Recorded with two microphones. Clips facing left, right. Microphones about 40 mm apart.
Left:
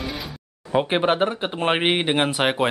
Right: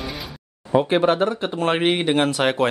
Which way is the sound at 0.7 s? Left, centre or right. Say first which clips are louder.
Right 2 dB; left.